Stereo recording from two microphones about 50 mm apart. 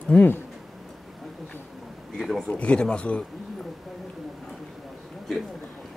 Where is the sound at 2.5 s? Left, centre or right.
Left.